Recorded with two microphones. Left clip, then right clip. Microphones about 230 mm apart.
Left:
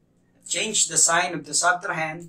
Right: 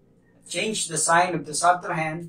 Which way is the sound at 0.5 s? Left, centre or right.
Left.